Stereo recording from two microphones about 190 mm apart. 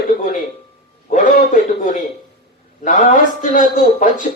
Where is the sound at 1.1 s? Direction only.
45° left (ahead or behind).